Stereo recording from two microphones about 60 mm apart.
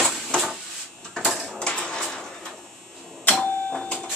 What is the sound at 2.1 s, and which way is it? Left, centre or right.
Printer, centre.